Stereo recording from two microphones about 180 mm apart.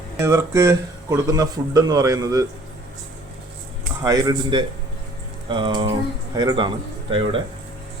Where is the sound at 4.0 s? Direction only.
20° right (ahead or behind).